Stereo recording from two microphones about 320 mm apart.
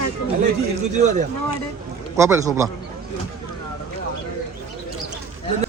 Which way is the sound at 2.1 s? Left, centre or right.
Centre.